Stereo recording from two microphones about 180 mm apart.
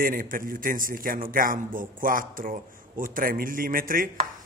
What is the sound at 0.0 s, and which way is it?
A man's voice, 50° right (ahead or behind).